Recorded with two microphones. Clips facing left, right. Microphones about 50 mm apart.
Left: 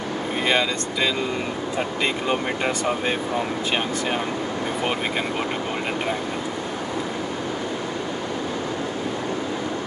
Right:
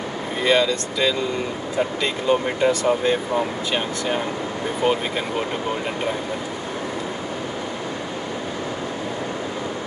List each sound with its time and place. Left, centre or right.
0.5 s speech: left